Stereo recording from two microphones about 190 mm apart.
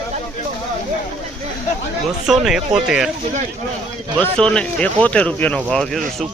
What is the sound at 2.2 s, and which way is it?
Speech, centre (ahead or behind).